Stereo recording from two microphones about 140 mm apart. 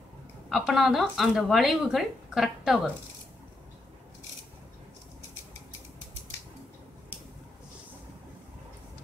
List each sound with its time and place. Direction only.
0.5 s speech: centre (ahead or behind)